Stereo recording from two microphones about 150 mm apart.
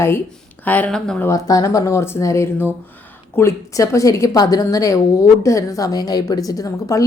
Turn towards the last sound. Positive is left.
turn(degrees=20)  # may be behind; listen again after turning